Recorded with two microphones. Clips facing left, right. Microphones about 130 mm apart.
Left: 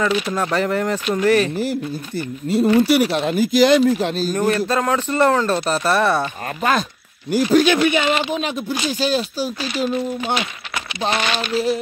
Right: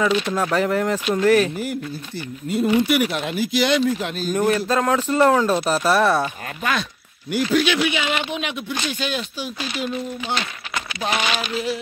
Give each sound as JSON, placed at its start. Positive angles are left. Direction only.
{"t": 0.0, "sound": "speech", "side_deg": 0}
{"t": 2.8, "sound": "speech", "side_deg": 30}
{"t": 4.3, "sound": "speech", "side_deg": 0}
{"t": 6.6, "sound": "speech", "side_deg": 40}
{"t": 8.4, "sound": "speech", "side_deg": 35}
{"t": 11.1, "sound": "speech", "side_deg": 0}
{"t": 11.5, "sound": "speech", "side_deg": 40}